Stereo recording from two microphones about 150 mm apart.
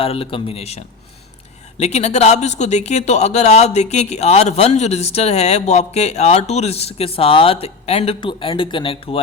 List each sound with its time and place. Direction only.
0.0 s speech: 40° left (ahead or behind)
1.8 s speech: 45° left (ahead or behind)